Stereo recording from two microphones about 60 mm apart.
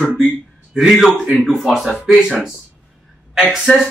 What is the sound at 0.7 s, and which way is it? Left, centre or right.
Speech, centre.